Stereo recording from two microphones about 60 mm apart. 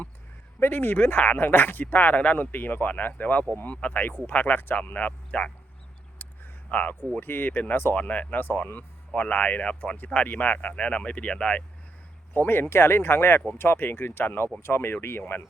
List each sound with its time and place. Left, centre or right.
0.6 s speech: left
6.1 s a sound: left
7.2 s speech: left; by 11.6 s centre
12.3 s speech: left